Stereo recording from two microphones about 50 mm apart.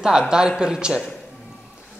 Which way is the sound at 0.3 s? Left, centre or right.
Centre.